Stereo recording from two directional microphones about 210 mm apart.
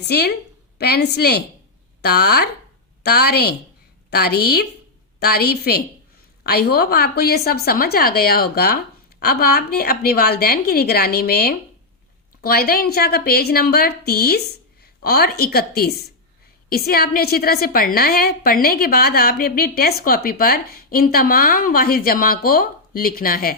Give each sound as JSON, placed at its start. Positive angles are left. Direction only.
{"t": 0.0, "sound": "a woman's voice", "side_deg": 50}